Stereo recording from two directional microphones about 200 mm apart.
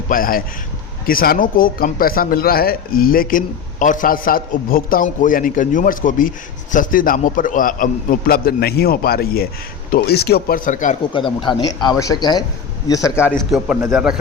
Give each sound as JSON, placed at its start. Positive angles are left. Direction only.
{"t": 0.1, "sound": "speech", "side_deg": 45}
{"t": 11.1, "sound": "a man's voice", "side_deg": 25}